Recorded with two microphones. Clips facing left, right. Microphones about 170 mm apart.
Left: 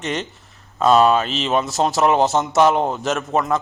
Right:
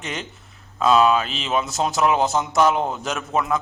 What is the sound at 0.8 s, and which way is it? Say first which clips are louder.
Speech: left 2 dB; 40° left (ahead or behind).